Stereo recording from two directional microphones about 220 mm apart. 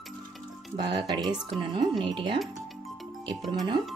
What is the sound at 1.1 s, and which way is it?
Speech, 20° right (ahead or behind).